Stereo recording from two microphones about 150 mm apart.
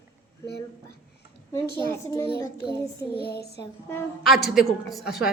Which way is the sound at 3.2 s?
90° left.